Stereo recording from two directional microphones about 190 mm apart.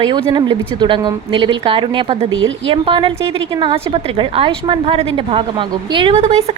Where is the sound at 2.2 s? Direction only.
90° right.